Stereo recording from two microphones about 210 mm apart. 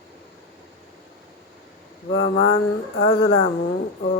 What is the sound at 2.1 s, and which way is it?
Speech, 65° left (ahead or behind).